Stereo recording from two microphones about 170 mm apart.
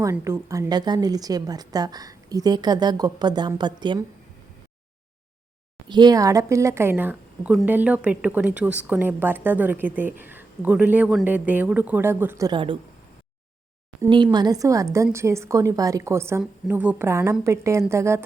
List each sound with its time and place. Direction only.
0.0 s a woman's voice: 15° right (ahead or behind)
5.9 s a woman's voice: 25° right (ahead or behind)
12.5 s a woman's voice: 30° right (ahead or behind)
14.1 s a woman's voice: 25° right (ahead or behind)